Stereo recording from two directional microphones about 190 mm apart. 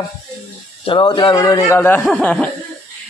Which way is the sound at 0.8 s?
25° left (ahead or behind).